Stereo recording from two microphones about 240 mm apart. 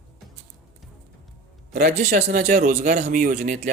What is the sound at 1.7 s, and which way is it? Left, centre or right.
A man's voice, right.